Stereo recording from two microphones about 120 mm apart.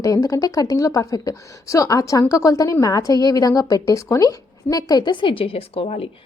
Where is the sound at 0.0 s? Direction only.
25° left (ahead or behind); by 6.1 s 60° left (ahead or behind).